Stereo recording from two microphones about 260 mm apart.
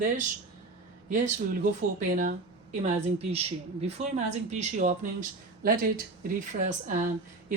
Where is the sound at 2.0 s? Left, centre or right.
Right.